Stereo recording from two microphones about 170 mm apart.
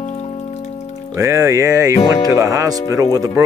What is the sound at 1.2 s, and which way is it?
Speech, 20° right (ahead or behind).